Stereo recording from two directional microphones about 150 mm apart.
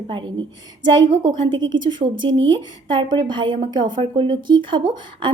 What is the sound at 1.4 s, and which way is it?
A woman's voice, 30° right (ahead or behind).